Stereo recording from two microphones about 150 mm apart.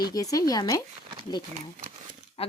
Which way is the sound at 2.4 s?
40° left (ahead or behind).